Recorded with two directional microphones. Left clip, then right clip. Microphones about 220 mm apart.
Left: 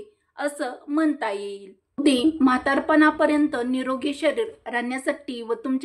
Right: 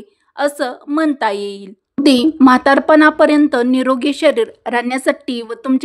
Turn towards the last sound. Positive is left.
turn(degrees=-50)  # may be behind; listen again after turning